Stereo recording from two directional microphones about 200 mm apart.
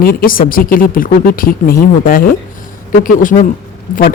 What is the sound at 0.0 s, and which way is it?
Speech, 45° left (ahead or behind).